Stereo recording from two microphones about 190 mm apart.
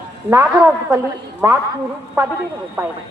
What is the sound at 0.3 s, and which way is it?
A woman's voice, 15° right (ahead or behind).